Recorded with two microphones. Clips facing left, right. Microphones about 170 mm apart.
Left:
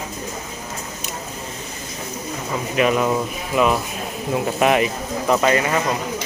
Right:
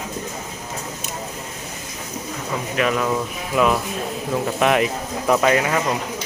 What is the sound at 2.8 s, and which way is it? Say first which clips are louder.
Speech: left 3 dB; 15° left (ahead or behind).